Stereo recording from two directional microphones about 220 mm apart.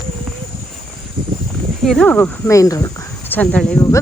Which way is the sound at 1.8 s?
5° left (ahead or behind).